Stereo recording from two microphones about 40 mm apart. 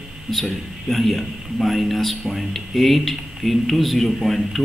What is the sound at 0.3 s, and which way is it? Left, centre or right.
A man's voice, centre.